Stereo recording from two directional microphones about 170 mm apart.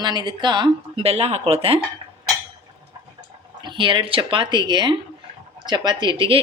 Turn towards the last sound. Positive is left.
turn(degrees=-30)  # may be behind; listen again after turning